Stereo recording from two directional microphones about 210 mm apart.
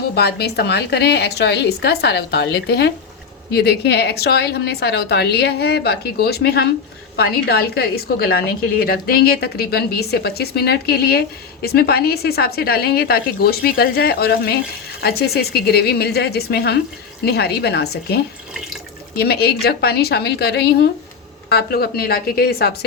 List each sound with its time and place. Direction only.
0.1 s a woman's voice: 50° left (ahead or behind)